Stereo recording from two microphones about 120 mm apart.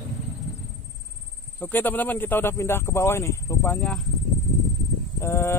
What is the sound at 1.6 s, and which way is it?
Speech, 15° left (ahead or behind).